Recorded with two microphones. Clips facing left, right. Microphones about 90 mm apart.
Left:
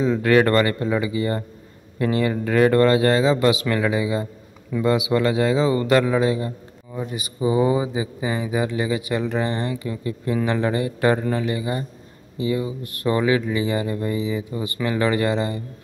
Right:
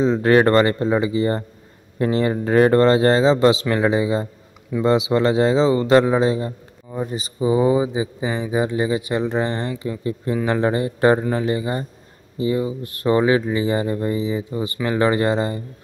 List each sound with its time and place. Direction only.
0.0 s speech: 30° right (ahead or behind)